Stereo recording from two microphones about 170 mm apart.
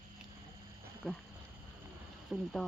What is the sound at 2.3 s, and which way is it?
Speech, centre (ahead or behind).